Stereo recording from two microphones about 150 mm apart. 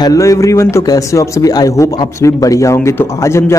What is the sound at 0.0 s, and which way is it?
Speech, 25° left (ahead or behind).